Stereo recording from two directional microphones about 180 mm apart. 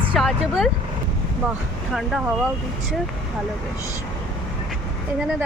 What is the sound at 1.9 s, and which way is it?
Speech, centre (ahead or behind).